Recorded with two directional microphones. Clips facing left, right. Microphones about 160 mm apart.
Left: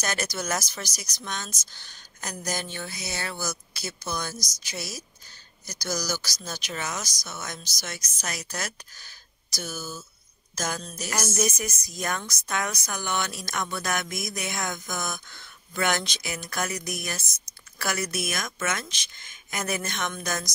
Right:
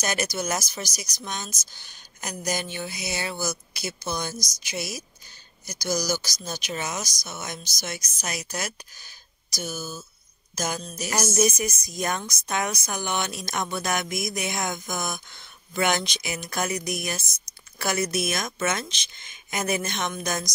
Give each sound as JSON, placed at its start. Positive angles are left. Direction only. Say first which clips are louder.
{"t": 0.0, "sound": "a woman's voice", "louder": "right 3 dB", "side_deg": -15}